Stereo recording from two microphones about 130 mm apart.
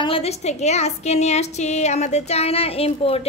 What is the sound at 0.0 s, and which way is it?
A woman's voice, 50° left (ahead or behind).